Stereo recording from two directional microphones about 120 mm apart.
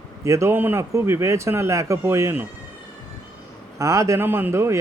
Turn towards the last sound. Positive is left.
turn(degrees=-25)  # may be behind; listen again after turning